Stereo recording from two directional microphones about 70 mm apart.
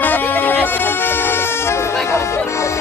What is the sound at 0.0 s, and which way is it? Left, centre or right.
Music, left.